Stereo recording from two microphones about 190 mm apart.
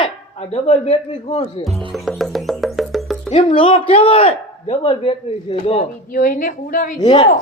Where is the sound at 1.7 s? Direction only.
25° right (ahead or behind).